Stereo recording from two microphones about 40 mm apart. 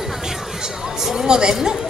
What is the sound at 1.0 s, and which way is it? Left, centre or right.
Speech, centre.